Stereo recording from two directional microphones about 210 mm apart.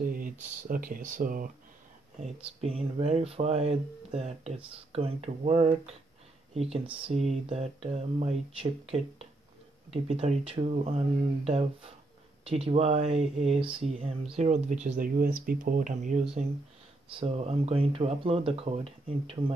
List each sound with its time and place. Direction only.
0.0 s speech: 40° right (ahead or behind)
2.2 s speech: 30° right (ahead or behind)